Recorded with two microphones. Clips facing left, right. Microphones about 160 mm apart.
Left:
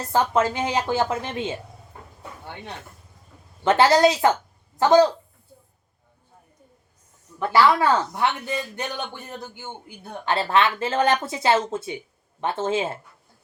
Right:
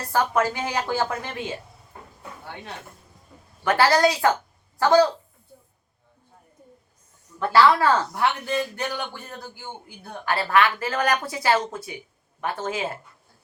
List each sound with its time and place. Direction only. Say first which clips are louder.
0.1 s speech: left 2 dB; 20° left (ahead or behind)
3.6 s speech: left 3 dB; 25° left (ahead or behind)
7.3 s speech: right 1 dB; 15° left (ahead or behind)